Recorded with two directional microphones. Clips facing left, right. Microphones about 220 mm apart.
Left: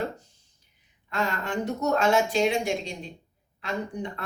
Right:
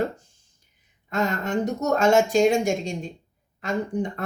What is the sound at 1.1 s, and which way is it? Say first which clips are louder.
Speech: right 4 dB; 45° right (ahead or behind).